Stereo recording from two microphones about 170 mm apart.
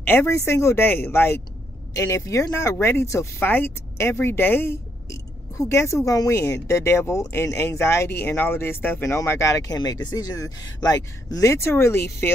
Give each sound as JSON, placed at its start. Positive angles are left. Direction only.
{"t": 0.0, "sound": "speech", "side_deg": 15}